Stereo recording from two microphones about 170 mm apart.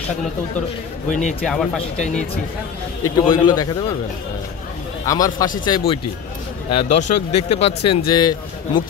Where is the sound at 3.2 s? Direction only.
25° left (ahead or behind).